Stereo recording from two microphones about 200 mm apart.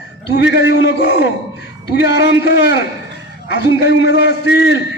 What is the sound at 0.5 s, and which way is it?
Speech, 55° left (ahead or behind).